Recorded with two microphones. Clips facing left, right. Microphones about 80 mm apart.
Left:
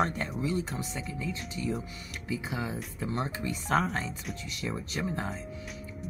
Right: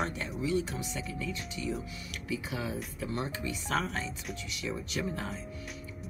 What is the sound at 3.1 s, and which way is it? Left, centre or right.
Speech, left.